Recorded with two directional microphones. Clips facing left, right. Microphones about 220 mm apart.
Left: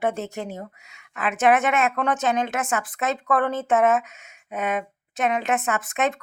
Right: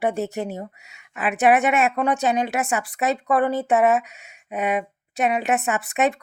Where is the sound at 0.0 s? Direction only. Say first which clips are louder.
Right 3 dB; 15° right (ahead or behind).